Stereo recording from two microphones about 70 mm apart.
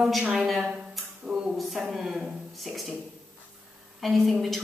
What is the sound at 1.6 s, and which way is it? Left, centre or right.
A woman's voice, centre.